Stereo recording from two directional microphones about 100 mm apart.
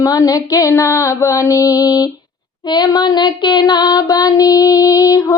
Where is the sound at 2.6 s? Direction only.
45° left (ahead or behind).